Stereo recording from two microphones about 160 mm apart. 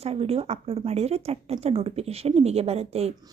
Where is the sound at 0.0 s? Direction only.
40° right (ahead or behind).